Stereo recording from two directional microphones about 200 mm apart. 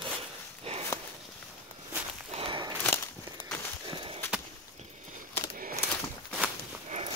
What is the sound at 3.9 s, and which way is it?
Walk, 25° right (ahead or behind).